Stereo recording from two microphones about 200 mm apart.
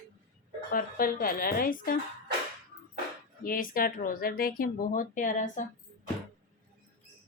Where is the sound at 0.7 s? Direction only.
45° left (ahead or behind).